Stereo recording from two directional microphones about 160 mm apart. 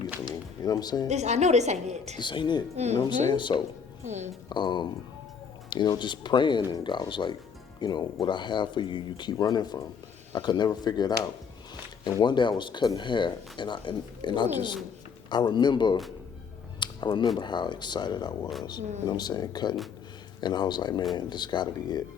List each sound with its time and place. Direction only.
0.3 s a sound: 25° left (ahead or behind)
1.0 s a woman's voice: 45° right (ahead or behind)
2.1 s speech: 30° left (ahead or behind)
2.7 s a woman's voice: 45° right (ahead or behind)
3.3 s speech: 30° left (ahead or behind)
4.0 s a woman's voice: 45° right (ahead or behind)
4.4 s speech: 30° left (ahead or behind)
16.8 s music: 30° left (ahead or behind)
17.3 s speech: 30° left (ahead or behind)